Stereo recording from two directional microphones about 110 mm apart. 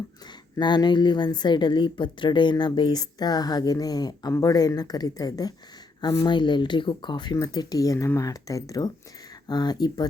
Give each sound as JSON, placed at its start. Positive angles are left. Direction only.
{"t": 0.5, "sound": "a woman's voice", "side_deg": 40}